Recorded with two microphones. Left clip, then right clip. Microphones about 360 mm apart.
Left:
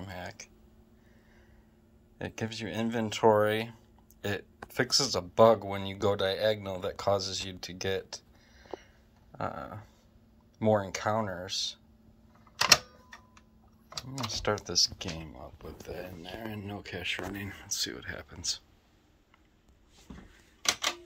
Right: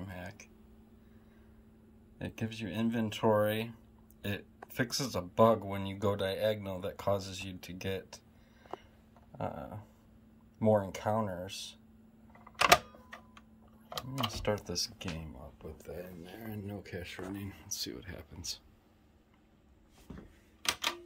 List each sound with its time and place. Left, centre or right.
0.0 s a sound: centre
2.1 s speech: centre
9.4 s speech: centre
14.4 s speech: centre